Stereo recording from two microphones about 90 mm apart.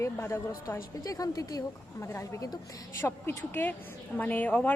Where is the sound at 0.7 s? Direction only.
40° left (ahead or behind).